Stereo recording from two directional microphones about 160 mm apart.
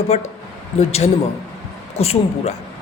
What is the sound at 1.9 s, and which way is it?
Speech, 40° left (ahead or behind).